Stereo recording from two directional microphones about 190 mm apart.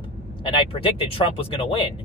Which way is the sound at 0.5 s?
30° left (ahead or behind).